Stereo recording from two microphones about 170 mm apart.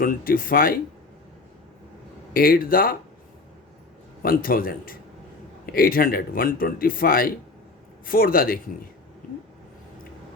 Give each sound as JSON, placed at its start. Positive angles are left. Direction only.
{"t": 0.0, "sound": "speech", "side_deg": 55}
{"t": 2.3, "sound": "speech", "side_deg": 60}
{"t": 4.2, "sound": "speech", "side_deg": 55}